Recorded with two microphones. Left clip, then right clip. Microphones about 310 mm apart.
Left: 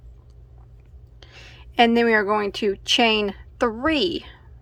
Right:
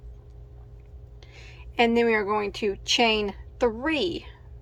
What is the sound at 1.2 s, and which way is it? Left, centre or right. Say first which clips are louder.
Speech: left 4 dB; centre.